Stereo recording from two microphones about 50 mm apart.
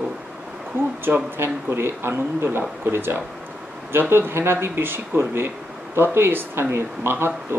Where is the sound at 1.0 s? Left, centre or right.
Right.